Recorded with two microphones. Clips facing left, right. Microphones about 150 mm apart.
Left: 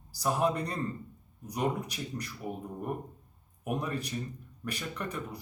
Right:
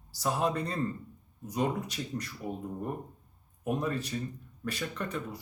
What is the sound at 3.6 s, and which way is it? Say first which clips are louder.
A man's voice: right 2 dB; 15° left (ahead or behind).